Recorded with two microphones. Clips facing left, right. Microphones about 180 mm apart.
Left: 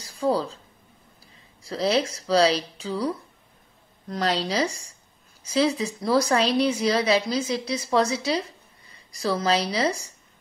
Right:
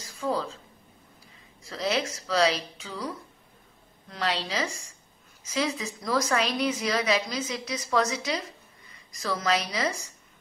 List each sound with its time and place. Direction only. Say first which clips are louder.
0.0 s speech: left 5 dB; 35° left (ahead or behind)
1.6 s a woman's voice: left 5 dB; 35° left (ahead or behind)